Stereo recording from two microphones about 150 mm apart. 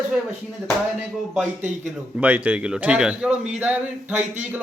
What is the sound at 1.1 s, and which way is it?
A man's voice, centre (ahead or behind).